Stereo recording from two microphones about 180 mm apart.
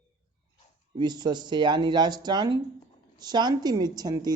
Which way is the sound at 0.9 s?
25° right (ahead or behind).